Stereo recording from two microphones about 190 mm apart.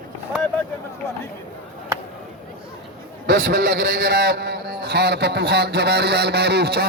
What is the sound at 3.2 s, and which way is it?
A man's voice, 65° right (ahead or behind).